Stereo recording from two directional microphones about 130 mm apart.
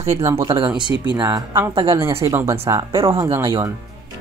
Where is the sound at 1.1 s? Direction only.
35° right (ahead or behind).